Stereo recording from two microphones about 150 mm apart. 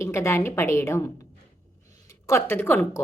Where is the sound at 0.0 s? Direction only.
20° left (ahead or behind).